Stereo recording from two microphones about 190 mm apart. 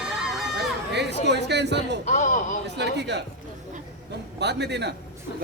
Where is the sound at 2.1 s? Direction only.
40° left (ahead or behind).